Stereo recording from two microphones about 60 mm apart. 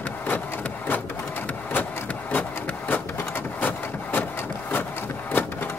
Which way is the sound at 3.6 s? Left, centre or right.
Left.